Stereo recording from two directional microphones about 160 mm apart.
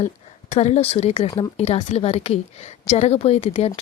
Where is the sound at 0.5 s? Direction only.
45° left (ahead or behind).